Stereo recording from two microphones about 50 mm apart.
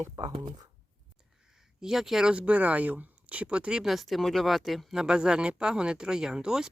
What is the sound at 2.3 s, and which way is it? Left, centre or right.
Speech, right.